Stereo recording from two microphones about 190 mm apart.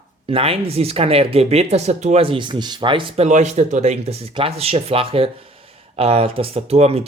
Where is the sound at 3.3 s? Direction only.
40° right (ahead or behind).